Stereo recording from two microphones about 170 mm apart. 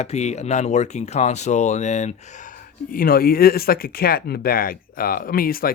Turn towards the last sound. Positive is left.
turn(degrees=60)  # may be behind; listen again after turning